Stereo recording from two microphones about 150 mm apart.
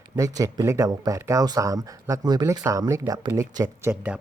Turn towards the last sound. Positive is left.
turn(degrees=-20)  # may be behind; listen again after turning